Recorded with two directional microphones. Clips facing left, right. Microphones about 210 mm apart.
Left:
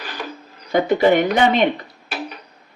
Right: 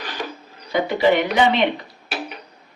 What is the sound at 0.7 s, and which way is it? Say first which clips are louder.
Speech: left 3 dB; 45° left (ahead or behind).